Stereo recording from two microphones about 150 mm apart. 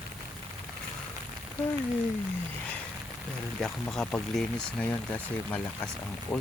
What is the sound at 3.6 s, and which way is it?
Speech, 5° left (ahead or behind).